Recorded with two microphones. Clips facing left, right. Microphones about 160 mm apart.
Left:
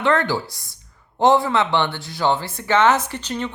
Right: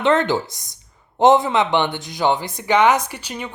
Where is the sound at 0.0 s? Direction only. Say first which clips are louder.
Right 2 dB; 20° right (ahead or behind).